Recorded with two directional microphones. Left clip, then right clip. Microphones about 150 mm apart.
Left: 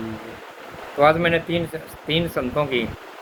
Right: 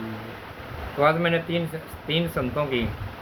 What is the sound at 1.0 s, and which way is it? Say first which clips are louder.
Speech: left 4 dB; 40° left (ahead or behind).